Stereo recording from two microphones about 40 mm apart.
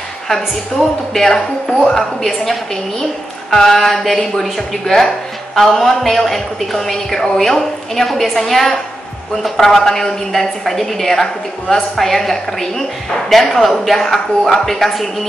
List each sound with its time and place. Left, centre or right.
1.1 s a woman's voice: centre
1.9 s a woman's voice: centre